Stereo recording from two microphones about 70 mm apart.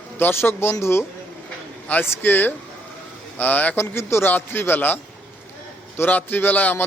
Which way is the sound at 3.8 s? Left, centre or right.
Left.